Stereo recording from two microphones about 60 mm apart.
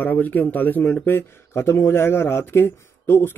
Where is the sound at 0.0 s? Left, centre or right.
Left.